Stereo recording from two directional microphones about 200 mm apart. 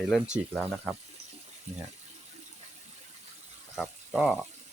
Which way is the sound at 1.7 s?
35° right (ahead or behind).